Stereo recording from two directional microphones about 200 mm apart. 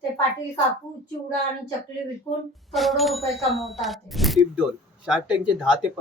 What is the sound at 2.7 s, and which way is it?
Speech, centre (ahead or behind).